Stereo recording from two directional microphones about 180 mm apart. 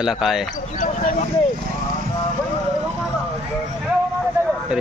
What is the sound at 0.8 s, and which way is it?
Speech, 45° left (ahead or behind).